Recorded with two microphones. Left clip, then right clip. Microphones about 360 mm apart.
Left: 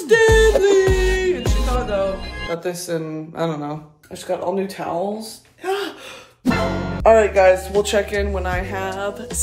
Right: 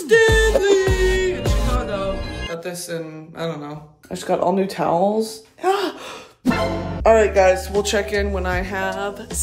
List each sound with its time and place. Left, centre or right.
0.0 s music: centre
2.5 s speech: centre
4.1 s speech: right
6.4 s speech: centre